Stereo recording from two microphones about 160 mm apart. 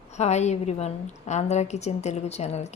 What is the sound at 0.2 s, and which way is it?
A woman's voice, 45° left (ahead or behind).